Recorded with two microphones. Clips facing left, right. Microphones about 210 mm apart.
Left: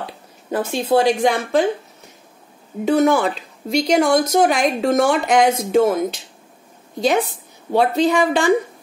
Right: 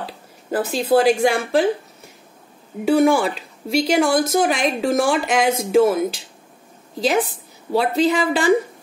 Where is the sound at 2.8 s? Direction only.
10° right (ahead or behind).